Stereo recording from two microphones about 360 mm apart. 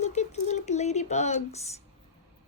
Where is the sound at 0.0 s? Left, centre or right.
Centre.